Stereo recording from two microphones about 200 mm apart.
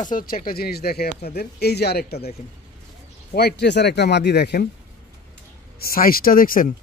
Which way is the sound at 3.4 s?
55° left (ahead or behind).